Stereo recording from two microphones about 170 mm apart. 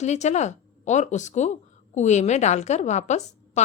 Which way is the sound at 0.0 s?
40° left (ahead or behind).